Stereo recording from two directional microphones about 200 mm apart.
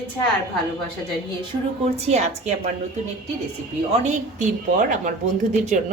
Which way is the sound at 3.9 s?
35° right (ahead or behind).